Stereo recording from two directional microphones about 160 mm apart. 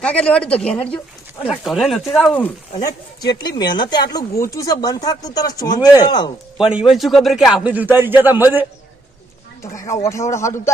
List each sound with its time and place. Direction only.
0.0 s speech: 5° left (ahead or behind)
3.3 s speech: 25° left (ahead or behind)
6.6 s a man's voice: 5° right (ahead or behind)
9.7 s speech: 20° left (ahead or behind)